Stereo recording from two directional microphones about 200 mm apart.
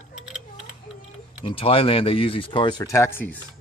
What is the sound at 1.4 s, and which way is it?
Speech, 30° left (ahead or behind).